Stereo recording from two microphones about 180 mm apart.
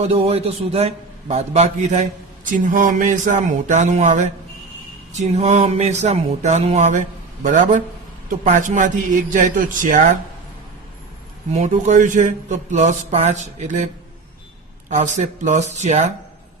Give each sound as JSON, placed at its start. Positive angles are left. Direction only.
{"t": 0.0, "sound": "a man's voice", "side_deg": -35}
{"t": 11.5, "sound": "a man's voice", "side_deg": -40}
{"t": 14.8, "sound": "a man's voice", "side_deg": -40}